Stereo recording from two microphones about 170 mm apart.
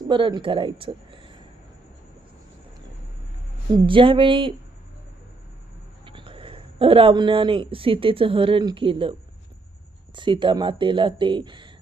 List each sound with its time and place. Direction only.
0.1 s speech: 30° right (ahead or behind)
3.8 s speech: 30° right (ahead or behind)
6.1 s speech: 30° right (ahead or behind)
10.2 s speech: 30° right (ahead or behind)